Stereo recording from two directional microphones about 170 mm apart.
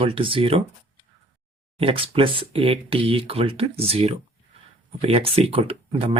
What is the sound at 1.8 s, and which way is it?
Speech, 30° right (ahead or behind).